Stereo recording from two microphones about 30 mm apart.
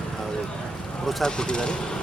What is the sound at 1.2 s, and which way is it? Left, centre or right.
Speech, left.